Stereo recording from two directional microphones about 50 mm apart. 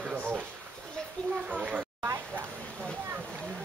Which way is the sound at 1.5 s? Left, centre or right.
Right.